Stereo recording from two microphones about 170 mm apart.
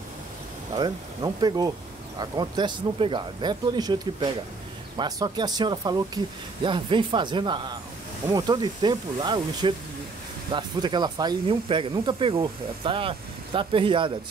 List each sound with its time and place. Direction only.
0.7 s speech: 25° right (ahead or behind)